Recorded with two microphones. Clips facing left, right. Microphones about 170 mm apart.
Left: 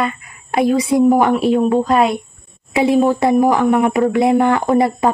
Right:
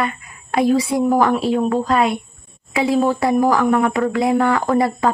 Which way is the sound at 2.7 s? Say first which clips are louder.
Left 3 dB; 20° left (ahead or behind).